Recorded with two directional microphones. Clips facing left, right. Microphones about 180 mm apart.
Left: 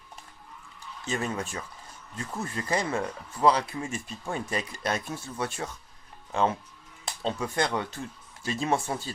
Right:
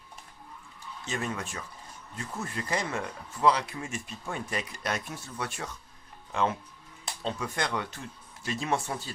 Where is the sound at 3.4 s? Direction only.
30° left (ahead or behind).